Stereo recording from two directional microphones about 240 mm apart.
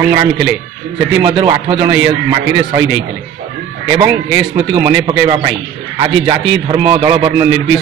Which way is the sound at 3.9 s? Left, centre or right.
Centre.